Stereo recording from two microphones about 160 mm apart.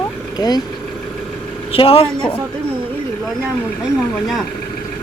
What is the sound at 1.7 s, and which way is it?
Speech, 35° left (ahead or behind).